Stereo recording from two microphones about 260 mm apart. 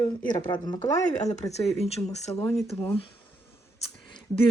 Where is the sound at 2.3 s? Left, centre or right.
Centre.